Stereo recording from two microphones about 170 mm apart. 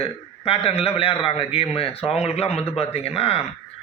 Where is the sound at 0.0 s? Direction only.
35° left (ahead or behind).